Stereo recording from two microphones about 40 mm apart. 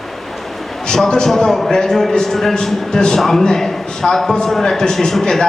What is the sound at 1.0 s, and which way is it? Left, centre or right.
Speech, left.